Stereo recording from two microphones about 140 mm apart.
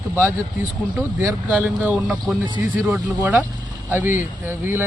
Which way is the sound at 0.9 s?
10° right (ahead or behind).